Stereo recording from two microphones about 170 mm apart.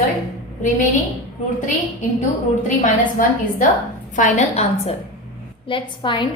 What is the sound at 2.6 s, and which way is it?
A woman's voice, 50° left (ahead or behind).